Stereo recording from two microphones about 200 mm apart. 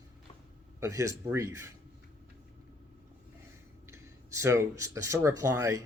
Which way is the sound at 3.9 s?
15° right (ahead or behind).